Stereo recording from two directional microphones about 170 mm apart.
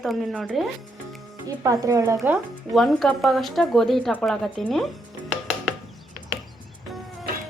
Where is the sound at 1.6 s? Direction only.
20° right (ahead or behind).